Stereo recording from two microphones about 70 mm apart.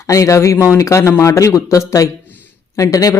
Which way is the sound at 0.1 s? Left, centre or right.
Left.